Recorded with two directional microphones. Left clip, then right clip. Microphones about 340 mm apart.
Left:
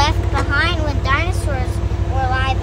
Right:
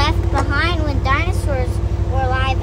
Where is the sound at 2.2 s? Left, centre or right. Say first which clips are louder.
Left 1 dB; centre.